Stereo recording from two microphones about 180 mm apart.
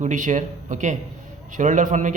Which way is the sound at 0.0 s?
45° right (ahead or behind).